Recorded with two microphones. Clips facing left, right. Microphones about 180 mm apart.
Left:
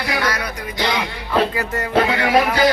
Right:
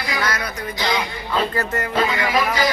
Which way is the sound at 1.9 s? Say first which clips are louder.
Left 5 dB; 65° left (ahead or behind).